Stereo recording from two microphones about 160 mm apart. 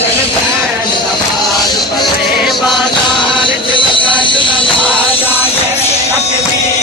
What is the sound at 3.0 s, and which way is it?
Music, 30° left (ahead or behind).